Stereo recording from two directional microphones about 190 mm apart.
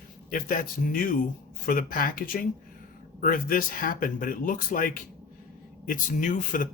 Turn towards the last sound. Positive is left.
turn(degrees=40)  # may be behind; listen again after turning